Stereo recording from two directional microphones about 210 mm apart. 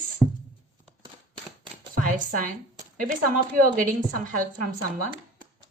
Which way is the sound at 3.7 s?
40° right (ahead or behind).